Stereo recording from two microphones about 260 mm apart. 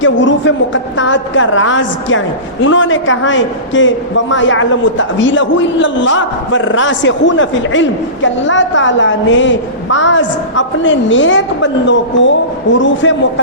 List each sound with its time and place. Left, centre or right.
0.0 s a woman's voice: left